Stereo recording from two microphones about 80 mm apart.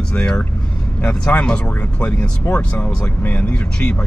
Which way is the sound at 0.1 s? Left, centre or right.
Centre.